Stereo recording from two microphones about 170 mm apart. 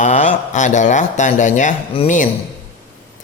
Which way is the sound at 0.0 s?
45° left (ahead or behind).